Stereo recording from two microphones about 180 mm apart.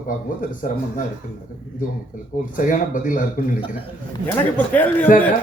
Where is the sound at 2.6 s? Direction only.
45° left (ahead or behind).